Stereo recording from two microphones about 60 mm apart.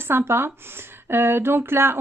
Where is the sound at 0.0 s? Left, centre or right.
Right.